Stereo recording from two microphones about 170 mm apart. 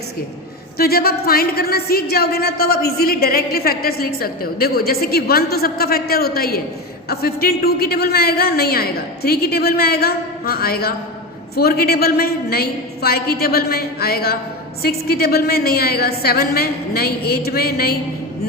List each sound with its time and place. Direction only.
0.8 s a woman's voice: 65° left (ahead or behind)